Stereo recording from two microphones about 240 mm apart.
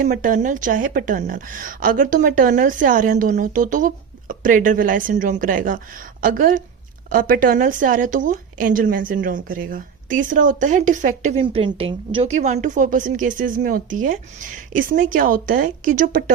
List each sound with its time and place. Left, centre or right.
0.0 s a woman's voice: right